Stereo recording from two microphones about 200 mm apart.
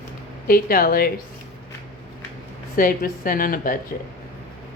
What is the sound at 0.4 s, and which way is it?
Speech, 45° left (ahead or behind).